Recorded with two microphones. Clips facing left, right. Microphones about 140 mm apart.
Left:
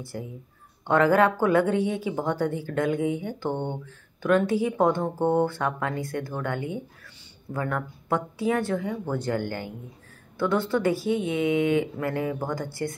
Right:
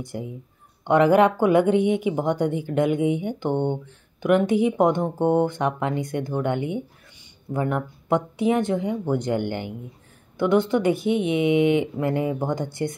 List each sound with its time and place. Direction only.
0.0 s speech: 20° right (ahead or behind)